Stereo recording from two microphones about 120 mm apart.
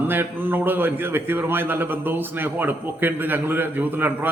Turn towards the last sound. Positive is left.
turn(degrees=-15)  # may be behind; listen again after turning